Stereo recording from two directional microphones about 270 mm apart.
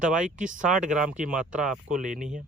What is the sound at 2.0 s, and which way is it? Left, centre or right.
Speech, right.